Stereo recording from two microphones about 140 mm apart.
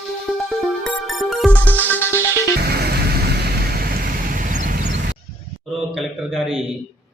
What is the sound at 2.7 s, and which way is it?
Music, 90° right.